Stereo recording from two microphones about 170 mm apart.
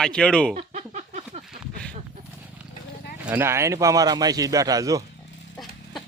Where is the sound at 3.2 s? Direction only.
10° right (ahead or behind).